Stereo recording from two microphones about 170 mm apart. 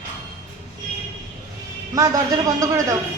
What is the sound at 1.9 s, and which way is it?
Speech, 20° right (ahead or behind).